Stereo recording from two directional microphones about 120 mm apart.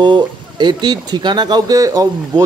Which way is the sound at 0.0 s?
40° right (ahead or behind).